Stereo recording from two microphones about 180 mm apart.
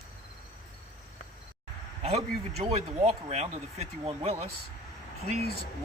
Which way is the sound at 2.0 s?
35° right (ahead or behind).